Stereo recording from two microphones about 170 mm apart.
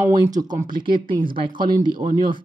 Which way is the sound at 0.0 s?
20° right (ahead or behind).